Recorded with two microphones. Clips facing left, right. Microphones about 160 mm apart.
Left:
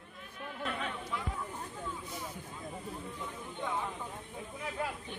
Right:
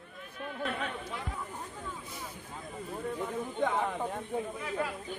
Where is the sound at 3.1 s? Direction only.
75° right (ahead or behind).